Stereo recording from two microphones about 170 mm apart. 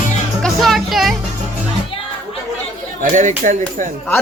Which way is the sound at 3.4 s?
50° right (ahead or behind).